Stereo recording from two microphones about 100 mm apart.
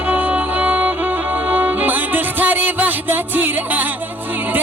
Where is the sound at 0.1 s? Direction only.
15° right (ahead or behind).